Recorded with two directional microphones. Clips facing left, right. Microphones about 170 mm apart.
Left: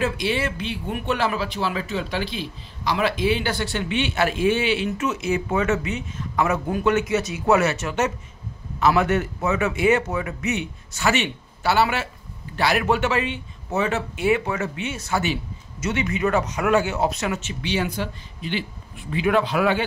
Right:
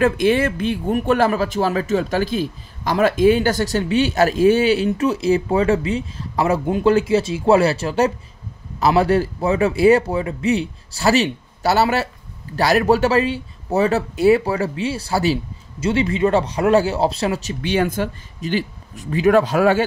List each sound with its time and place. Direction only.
0.0 s speech: 50° right (ahead or behind)